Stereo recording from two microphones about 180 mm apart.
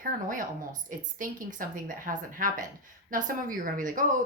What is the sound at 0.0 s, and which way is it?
Speech, 50° right (ahead or behind).